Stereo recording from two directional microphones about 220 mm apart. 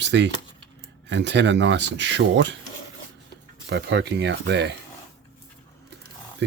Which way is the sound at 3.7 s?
55° right (ahead or behind).